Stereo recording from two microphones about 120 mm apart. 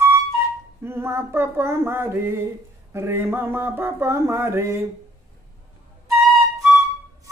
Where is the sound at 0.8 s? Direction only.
20° right (ahead or behind).